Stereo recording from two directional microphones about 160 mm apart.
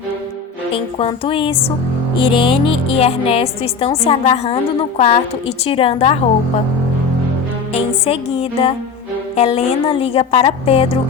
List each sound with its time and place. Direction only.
0.7 s a woman's voice: 35° left (ahead or behind)
7.7 s a woman's voice: 40° left (ahead or behind)